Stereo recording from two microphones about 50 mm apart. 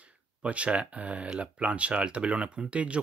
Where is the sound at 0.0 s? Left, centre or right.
Right.